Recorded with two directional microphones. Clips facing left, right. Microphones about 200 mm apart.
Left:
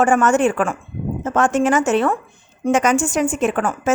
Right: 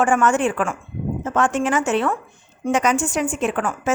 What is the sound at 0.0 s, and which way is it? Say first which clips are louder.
A woman's voice: left 3 dB; 40° left (ahead or behind).